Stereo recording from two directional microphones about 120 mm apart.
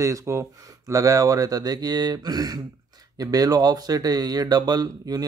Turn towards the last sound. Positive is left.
turn(degrees=-35)  # may be behind; listen again after turning